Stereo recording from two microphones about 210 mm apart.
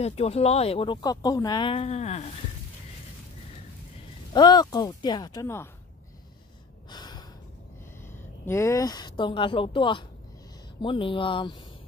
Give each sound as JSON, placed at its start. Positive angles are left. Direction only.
{"t": 0.0, "sound": "speech", "side_deg": 30}
{"t": 4.3, "sound": "speech", "side_deg": 20}
{"t": 6.9, "sound": "gasp", "side_deg": 20}
{"t": 8.5, "sound": "speech", "side_deg": 15}